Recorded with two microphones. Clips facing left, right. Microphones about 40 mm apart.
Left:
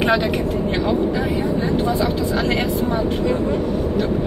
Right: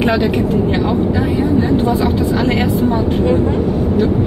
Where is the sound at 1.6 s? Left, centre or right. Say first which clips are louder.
Right 5 dB; right.